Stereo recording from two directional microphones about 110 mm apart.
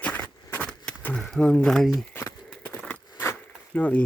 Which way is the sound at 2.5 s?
10° left (ahead or behind).